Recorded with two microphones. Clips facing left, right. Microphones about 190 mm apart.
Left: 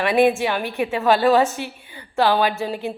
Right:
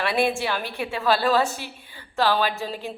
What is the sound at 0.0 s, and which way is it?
A woman's voice, 15° left (ahead or behind).